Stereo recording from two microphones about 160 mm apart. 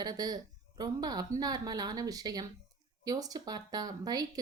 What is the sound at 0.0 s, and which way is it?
Speech, 25° right (ahead or behind).